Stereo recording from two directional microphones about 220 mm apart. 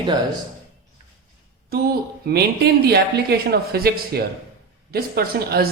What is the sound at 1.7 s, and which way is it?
A woman's voice, 45° right (ahead or behind).